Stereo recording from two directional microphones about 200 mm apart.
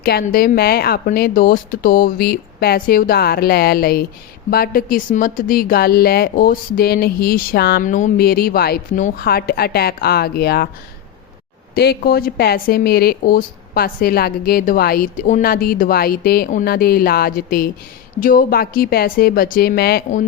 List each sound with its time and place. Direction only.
0.0 s speech: 50° left (ahead or behind)
11.7 s speech: 50° left (ahead or behind)